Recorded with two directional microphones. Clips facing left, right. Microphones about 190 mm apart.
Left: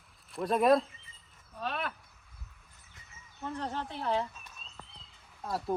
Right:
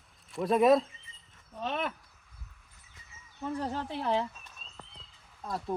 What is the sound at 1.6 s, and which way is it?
Speech, 20° right (ahead or behind).